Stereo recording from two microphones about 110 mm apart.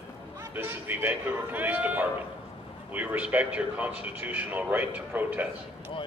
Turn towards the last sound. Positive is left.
turn(degrees=-15)  # may be behind; listen again after turning